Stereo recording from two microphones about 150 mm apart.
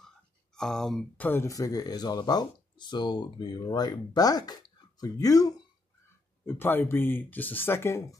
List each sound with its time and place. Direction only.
0.6 s speech: 5° left (ahead or behind)